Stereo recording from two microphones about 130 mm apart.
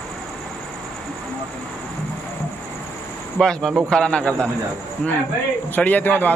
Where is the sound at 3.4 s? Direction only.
5° left (ahead or behind).